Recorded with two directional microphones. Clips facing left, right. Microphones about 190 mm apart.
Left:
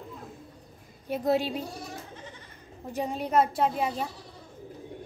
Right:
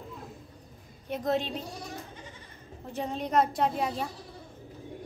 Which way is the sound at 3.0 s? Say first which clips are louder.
Left 2 dB; 10° left (ahead or behind).